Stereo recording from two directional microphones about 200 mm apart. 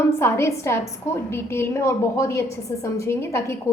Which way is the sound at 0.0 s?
15° left (ahead or behind).